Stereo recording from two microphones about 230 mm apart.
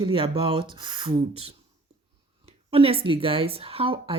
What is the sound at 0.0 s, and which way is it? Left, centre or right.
Speech, right.